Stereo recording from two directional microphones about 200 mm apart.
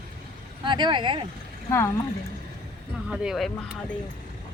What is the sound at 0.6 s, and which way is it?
Speech, 25° right (ahead or behind).